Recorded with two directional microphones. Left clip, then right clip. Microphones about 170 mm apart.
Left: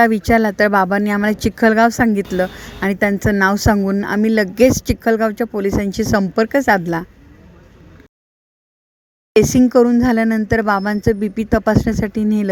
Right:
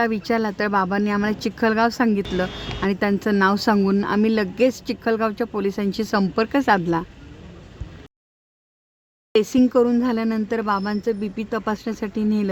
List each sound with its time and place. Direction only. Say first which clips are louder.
0.0 s speech: left 8 dB; 30° left (ahead or behind)
3.8 s speech: left 1 dB; 10° left (ahead or behind)
4.0 s speech: left 4 dB; 25° left (ahead or behind)
9.3 s speech: left 6 dB; 35° left (ahead or behind)